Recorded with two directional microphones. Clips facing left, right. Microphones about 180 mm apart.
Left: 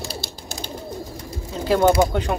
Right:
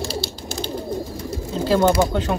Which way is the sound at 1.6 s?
15° left (ahead or behind).